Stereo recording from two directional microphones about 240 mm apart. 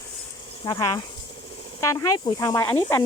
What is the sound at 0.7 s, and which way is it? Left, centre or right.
Speech, centre.